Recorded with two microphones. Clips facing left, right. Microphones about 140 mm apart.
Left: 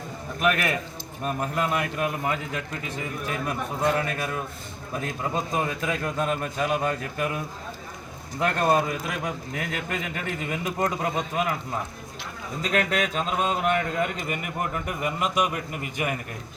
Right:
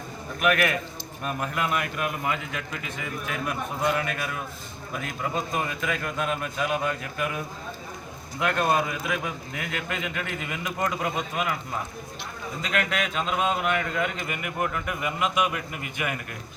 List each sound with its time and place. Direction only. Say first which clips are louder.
0.3 s a man's voice: right 1 dB; 30° left (ahead or behind)
8.4 s speech: left 2 dB; 40° left (ahead or behind)
12.6 s speech: left 3 dB; 35° left (ahead or behind)